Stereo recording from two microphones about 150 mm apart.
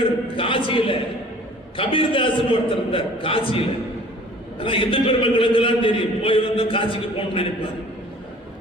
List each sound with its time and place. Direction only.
0.0 s a man's voice: 35° left (ahead or behind)